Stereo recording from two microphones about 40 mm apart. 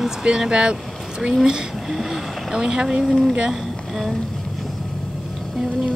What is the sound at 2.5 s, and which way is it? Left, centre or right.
Speech, centre.